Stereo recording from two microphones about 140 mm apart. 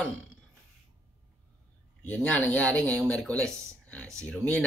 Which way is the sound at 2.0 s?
10° left (ahead or behind).